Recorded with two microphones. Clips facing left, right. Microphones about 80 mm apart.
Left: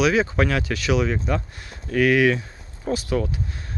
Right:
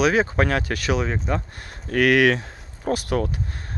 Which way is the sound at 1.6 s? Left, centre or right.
Right.